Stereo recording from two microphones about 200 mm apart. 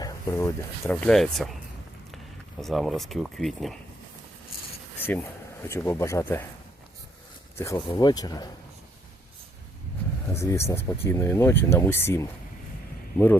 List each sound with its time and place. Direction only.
0.0 s speech: 15° left (ahead or behind)
2.6 s speech: centre (ahead or behind)
4.9 s a sound: 10° left (ahead or behind)
5.6 s speech: 15° left (ahead or behind)
7.6 s speech: 15° left (ahead or behind)
10.3 s speech: 15° left (ahead or behind)